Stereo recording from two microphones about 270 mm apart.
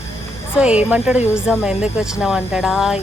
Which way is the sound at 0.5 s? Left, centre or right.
Centre.